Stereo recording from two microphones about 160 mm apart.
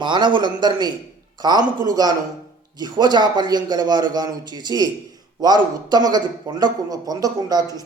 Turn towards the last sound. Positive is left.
turn(degrees=-25)  # may be behind; listen again after turning